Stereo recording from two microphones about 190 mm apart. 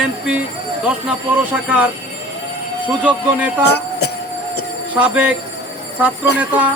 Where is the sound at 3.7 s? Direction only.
60° left (ahead or behind).